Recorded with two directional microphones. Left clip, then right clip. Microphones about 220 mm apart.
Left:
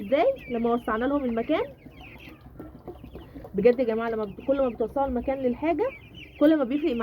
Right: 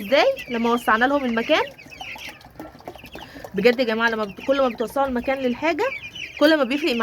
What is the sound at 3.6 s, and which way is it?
Speech, 35° right (ahead or behind).